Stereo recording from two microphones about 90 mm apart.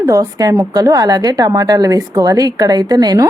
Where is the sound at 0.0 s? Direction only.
40° right (ahead or behind).